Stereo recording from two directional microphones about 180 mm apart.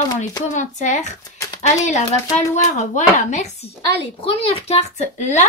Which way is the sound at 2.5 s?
40° left (ahead or behind).